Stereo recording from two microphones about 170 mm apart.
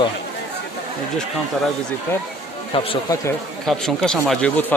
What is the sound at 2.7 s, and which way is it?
Speech, 35° left (ahead or behind).